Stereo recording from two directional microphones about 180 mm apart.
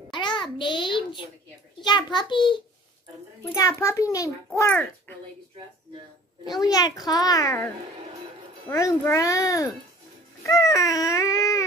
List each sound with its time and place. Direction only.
0.1 s a sound: 25° left (ahead or behind)
1.8 s a child's voice: 25° left (ahead or behind)
6.6 s a child's voice: 20° left (ahead or behind)
8.6 s baby cry: 15° left (ahead or behind)